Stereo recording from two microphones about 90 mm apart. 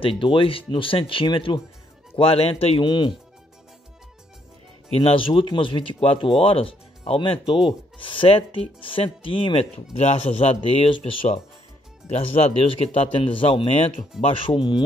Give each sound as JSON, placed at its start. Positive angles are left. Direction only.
{"t": 0.2, "sound": "speech", "side_deg": 80}
{"t": 2.1, "sound": "speech", "side_deg": 90}
{"t": 5.0, "sound": "speech", "side_deg": 75}
{"t": 10.2, "sound": "speech", "side_deg": 90}
{"t": 12.2, "sound": "speech", "side_deg": 90}